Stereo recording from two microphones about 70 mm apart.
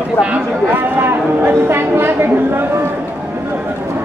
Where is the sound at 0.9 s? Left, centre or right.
Right.